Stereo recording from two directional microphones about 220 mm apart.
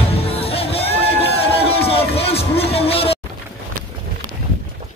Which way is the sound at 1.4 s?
25° left (ahead or behind).